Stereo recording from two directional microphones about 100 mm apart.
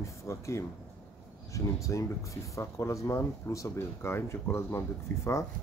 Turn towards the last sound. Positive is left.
turn(degrees=25)  # may be behind; listen again after turning